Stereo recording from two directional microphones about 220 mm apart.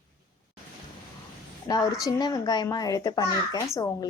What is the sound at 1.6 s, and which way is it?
A woman's voice, 15° left (ahead or behind).